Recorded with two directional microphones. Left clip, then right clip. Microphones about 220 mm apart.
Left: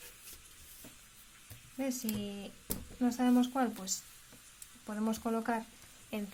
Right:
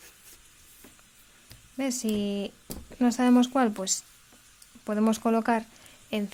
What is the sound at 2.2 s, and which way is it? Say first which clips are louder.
Speech: right 12 dB; 45° right (ahead or behind).